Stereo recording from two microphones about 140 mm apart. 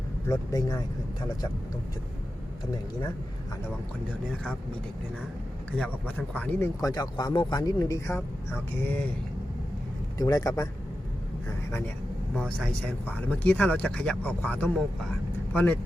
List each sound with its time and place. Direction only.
0.3 s speech: 25° left (ahead or behind)
5.8 s speech: 10° left (ahead or behind)
6.8 s speech: 30° left (ahead or behind)
10.2 s speech: 25° left (ahead or behind)
12.3 s speech: 5° left (ahead or behind)